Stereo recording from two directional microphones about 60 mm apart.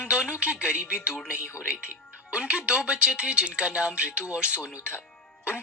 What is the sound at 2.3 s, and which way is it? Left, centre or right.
Speech, centre.